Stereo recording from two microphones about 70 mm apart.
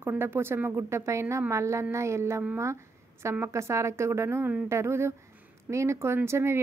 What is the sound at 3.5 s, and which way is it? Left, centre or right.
A woman's voice, right.